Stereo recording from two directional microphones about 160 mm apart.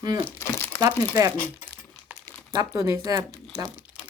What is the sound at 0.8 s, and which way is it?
Speech, 20° right (ahead or behind).